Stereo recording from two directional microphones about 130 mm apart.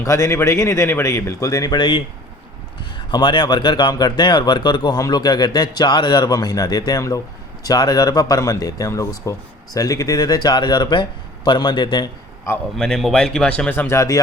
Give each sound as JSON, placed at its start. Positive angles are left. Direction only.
{"t": 0.0, "sound": "speech", "side_deg": 20}
{"t": 3.1, "sound": "speech", "side_deg": 35}
{"t": 12.7, "sound": "speech", "side_deg": 5}